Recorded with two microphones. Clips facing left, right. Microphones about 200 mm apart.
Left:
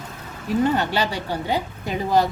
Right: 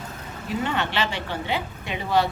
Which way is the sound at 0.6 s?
40° left (ahead or behind).